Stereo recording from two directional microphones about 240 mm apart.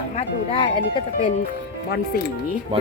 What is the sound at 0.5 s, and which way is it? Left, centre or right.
Speech, left.